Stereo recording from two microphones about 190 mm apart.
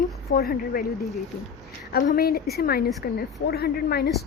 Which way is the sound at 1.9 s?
55° left (ahead or behind).